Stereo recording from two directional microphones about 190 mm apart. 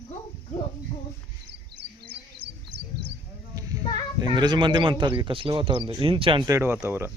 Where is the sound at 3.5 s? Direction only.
20° right (ahead or behind).